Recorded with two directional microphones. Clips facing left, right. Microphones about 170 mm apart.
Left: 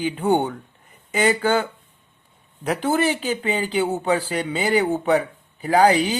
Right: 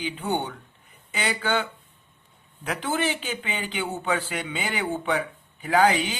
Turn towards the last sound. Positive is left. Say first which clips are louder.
# left 5 dB
turn(degrees=35)  # may be behind; listen again after turning